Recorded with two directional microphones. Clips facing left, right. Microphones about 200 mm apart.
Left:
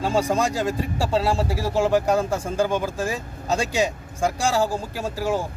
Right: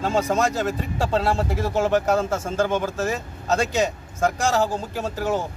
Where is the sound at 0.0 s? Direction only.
10° left (ahead or behind).